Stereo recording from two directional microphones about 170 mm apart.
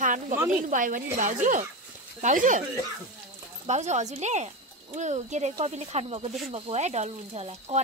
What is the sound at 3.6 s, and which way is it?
Speech, 40° right (ahead or behind).